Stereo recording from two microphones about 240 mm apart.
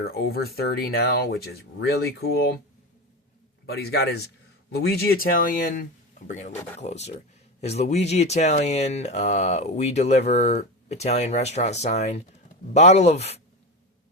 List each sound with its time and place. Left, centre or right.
0.0 s speech: left
3.7 s speech: left